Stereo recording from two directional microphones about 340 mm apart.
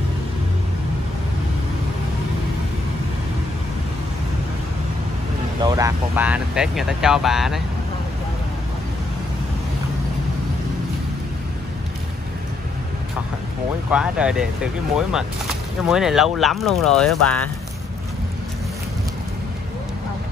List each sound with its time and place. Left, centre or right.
5.6 s speech: centre
13.9 s speech: centre